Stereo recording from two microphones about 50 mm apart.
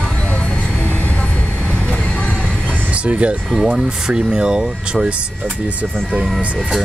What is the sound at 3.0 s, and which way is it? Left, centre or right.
Speech, right.